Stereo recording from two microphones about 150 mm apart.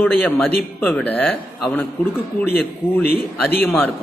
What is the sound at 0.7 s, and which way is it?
Speech, 10° left (ahead or behind).